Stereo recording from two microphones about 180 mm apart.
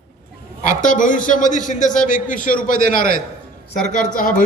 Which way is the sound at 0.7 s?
45° left (ahead or behind).